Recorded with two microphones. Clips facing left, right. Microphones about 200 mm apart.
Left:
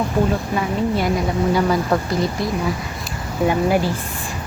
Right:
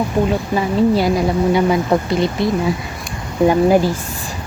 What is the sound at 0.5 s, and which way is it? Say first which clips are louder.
Speech: right 5 dB; 30° right (ahead or behind).